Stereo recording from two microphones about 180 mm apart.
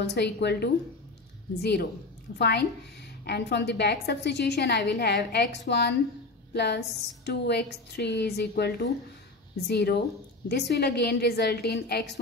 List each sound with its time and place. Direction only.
0.1 s a woman's voice: 70° left (ahead or behind)